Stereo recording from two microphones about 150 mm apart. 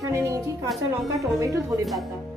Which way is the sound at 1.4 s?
20° right (ahead or behind).